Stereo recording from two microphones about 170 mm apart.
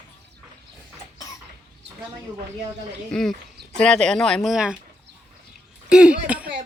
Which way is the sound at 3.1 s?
5° left (ahead or behind).